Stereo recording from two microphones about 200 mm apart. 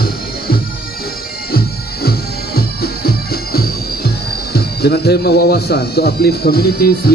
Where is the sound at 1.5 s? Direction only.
50° left (ahead or behind).